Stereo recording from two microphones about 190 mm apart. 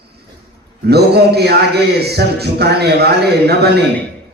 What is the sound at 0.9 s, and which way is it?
A man's voice, 60° right (ahead or behind).